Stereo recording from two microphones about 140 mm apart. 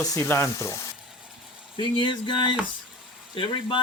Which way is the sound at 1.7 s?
35° left (ahead or behind).